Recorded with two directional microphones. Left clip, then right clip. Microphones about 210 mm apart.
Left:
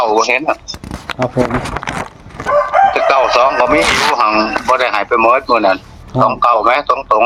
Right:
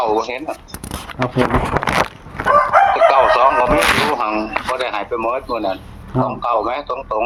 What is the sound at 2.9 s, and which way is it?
A man's voice, 20° left (ahead or behind).